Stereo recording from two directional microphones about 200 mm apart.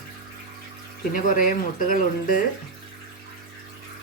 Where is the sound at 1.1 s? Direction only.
45° left (ahead or behind).